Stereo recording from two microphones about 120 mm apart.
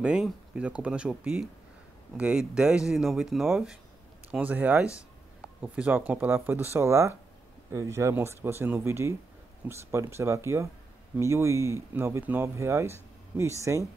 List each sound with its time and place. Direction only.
0.0 s speech: 10° right (ahead or behind); by 13.8 s 25° right (ahead or behind)